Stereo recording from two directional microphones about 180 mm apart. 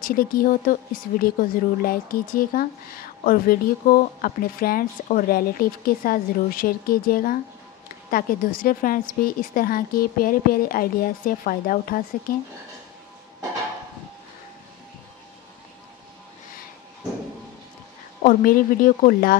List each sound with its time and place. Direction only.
0.0 s a woman's voice: 55° left (ahead or behind)
18.2 s a woman's voice: 50° left (ahead or behind)